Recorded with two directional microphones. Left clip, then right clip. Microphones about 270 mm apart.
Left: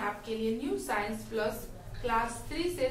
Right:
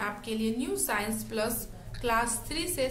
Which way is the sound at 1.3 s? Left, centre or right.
Right.